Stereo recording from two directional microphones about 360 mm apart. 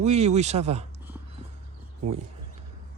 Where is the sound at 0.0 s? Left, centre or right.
Centre.